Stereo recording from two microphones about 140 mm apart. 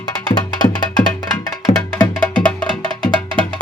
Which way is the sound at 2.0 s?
10° left (ahead or behind).